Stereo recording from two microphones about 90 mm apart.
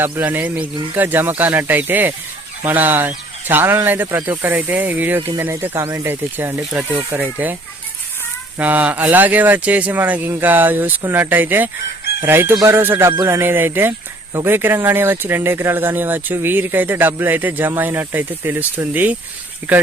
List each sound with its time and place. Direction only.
0.2 s speech: 20° right (ahead or behind)
8.5 s speech: 20° right (ahead or behind)